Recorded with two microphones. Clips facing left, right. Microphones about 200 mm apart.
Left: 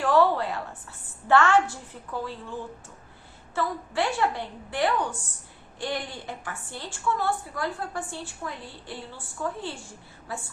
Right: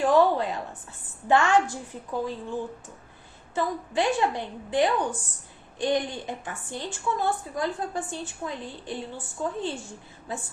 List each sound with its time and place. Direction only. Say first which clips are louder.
0.0 s a woman's voice: right 1 dB; 20° right (ahead or behind)